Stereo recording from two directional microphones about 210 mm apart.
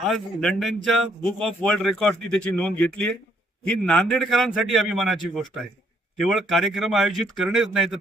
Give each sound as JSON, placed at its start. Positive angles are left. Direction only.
{"t": 0.0, "sound": "a man's voice", "side_deg": 0}